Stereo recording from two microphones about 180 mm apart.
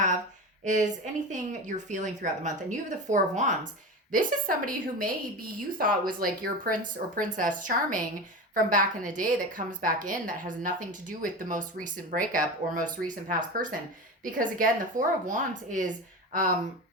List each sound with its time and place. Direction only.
0.6 s speech: 45° right (ahead or behind)